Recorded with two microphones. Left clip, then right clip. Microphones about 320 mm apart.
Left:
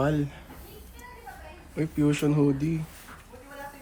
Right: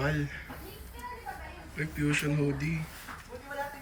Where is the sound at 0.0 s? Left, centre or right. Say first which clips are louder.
Left 5 dB; centre.